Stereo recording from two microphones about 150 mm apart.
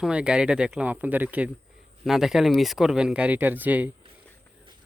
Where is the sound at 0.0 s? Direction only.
5° right (ahead or behind).